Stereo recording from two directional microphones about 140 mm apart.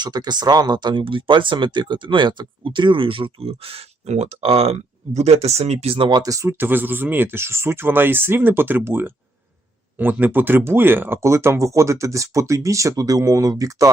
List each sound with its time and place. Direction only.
0.0 s speech: 30° right (ahead or behind)